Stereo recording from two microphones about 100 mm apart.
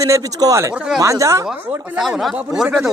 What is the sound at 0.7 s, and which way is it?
Speech, 5° right (ahead or behind).